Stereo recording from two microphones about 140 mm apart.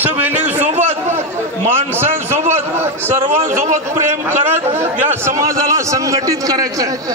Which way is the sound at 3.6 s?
55° right (ahead or behind).